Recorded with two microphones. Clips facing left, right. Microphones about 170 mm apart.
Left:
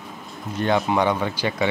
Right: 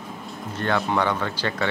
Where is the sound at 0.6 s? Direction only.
15° left (ahead or behind).